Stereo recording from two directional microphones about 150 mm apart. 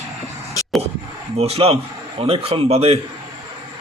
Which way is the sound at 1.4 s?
40° right (ahead or behind).